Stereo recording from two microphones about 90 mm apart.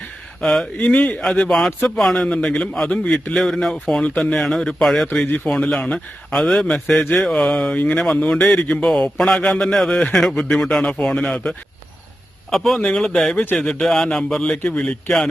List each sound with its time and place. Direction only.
0.4 s a man's voice: 5° left (ahead or behind)
0.8 s a man's voice: 15° left (ahead or behind); by 5.0 s centre (ahead or behind)
5.2 s a man's voice: 20° left (ahead or behind)
5.5 s a man's voice: 10° left (ahead or behind)
13.3 s a man's voice: 20° left (ahead or behind)
13.6 s a man's voice: 5° left (ahead or behind)